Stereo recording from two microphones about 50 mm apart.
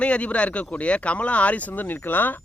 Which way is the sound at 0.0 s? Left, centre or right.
Left.